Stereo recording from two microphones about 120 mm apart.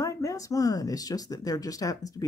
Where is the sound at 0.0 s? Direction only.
25° left (ahead or behind).